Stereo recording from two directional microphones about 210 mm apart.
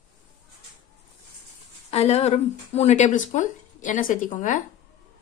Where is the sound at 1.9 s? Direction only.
30° left (ahead or behind).